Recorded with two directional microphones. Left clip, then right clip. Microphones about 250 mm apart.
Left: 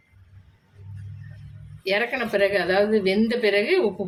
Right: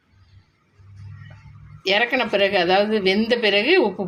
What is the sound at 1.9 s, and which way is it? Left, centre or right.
A woman's voice, centre.